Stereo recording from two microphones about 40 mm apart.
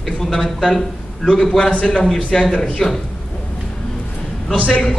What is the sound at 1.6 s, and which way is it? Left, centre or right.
Speech, left.